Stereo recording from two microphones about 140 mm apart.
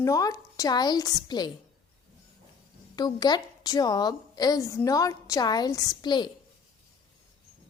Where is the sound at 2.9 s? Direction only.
30° left (ahead or behind).